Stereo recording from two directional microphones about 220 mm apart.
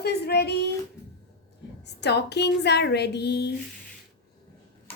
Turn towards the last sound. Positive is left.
turn(degrees=50)  # may be behind; listen again after turning